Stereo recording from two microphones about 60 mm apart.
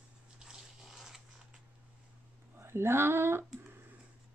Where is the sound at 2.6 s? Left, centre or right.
Right.